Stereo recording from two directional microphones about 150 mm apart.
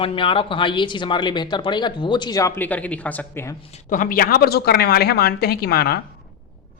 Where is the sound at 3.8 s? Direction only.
60° left (ahead or behind); by 6.0 s 90° left.